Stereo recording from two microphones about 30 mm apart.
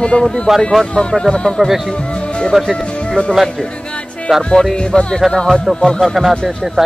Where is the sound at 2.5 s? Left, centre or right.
Centre.